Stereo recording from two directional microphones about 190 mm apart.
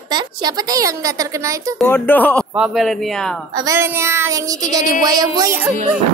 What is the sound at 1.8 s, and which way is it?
Speech, 10° left (ahead or behind).